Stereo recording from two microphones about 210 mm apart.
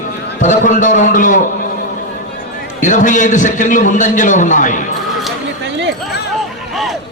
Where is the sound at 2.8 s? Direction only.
35° left (ahead or behind).